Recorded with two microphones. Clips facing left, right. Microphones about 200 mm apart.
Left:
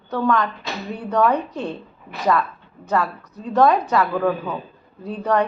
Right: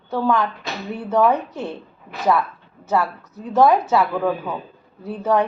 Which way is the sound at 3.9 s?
5° right (ahead or behind).